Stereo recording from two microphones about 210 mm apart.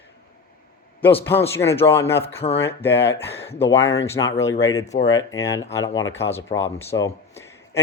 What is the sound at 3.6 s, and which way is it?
Speech, 10° left (ahead or behind).